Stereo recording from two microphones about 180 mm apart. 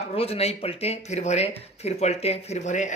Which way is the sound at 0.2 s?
35° left (ahead or behind).